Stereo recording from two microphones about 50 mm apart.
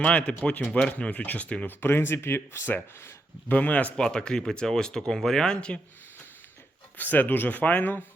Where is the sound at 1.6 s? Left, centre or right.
Left.